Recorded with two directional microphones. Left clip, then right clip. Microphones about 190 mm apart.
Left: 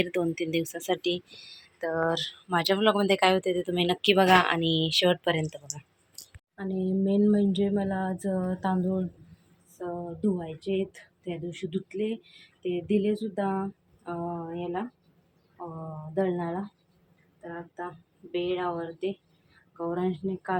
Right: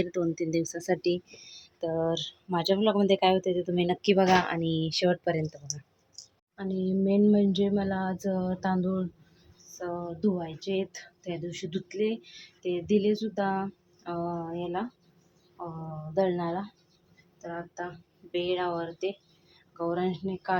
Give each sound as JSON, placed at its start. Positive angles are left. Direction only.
{"t": 0.0, "sound": "speech", "side_deg": -15}
{"t": 1.0, "sound": "speech", "side_deg": 15}
{"t": 1.8, "sound": "speech", "side_deg": -10}